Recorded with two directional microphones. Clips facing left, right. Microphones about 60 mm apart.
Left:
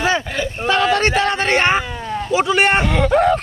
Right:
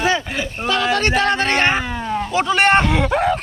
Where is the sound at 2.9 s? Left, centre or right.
Centre.